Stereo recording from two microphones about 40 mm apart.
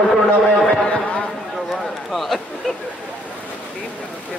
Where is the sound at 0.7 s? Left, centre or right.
Left.